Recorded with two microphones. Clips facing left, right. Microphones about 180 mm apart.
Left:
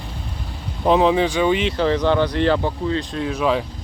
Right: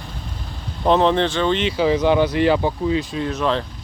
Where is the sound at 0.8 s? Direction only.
5° left (ahead or behind).